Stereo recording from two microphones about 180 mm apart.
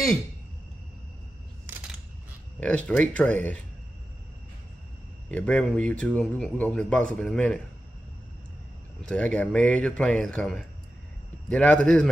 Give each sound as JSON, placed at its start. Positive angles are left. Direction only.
{"t": 2.6, "sound": "a man's voice", "side_deg": 5}
{"t": 5.3, "sound": "a man's voice", "side_deg": 5}
{"t": 9.0, "sound": "a man's voice", "side_deg": 5}